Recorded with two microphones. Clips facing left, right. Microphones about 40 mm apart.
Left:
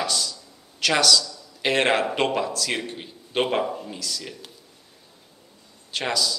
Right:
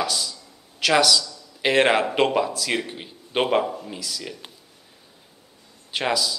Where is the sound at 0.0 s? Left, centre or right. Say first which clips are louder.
Right 1 dB; centre.